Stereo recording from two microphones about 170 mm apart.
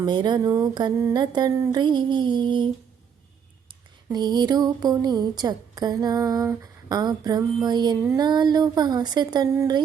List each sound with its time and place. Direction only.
0.0 s speech: 25° right (ahead or behind)
4.1 s speech: 25° right (ahead or behind)